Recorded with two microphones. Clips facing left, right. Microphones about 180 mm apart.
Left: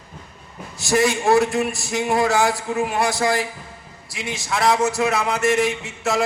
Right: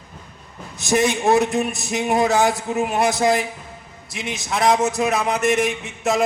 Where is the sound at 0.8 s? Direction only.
20° right (ahead or behind).